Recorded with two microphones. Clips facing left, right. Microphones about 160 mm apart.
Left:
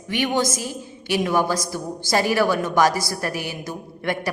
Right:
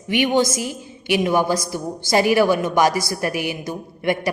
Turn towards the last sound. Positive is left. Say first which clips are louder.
# right 4 dB
turn(degrees=-15)  # may be behind; listen again after turning